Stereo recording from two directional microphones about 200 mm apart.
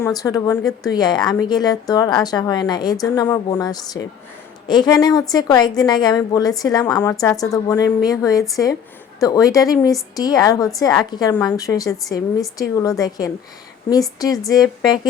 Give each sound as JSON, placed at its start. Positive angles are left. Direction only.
{"t": 0.2, "sound": "a woman's voice", "side_deg": 15}